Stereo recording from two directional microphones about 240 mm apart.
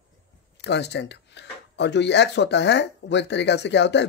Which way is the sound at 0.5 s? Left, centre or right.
Left.